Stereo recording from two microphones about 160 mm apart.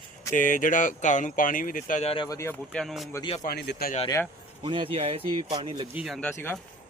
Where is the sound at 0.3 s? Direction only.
55° left (ahead or behind).